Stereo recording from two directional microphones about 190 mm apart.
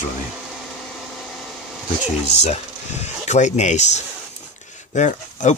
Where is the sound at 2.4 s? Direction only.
35° left (ahead or behind).